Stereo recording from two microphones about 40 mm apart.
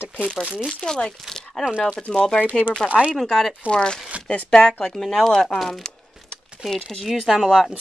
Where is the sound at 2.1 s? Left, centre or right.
Centre.